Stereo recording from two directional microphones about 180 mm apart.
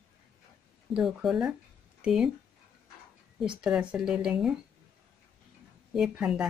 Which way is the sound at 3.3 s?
5° right (ahead or behind).